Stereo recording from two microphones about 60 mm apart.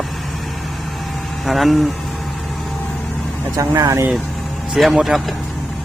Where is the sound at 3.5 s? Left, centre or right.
Right.